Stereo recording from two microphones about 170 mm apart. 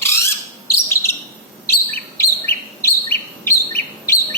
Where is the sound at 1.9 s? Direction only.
10° left (ahead or behind).